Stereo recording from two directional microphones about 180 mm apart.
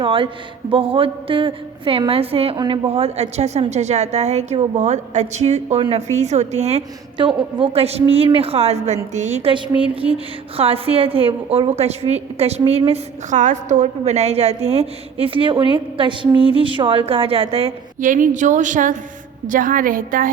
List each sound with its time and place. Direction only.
0.0 s a woman's voice: 30° right (ahead or behind)
10.6 s a woman's voice: 30° right (ahead or behind)
18.0 s speech: 45° right (ahead or behind)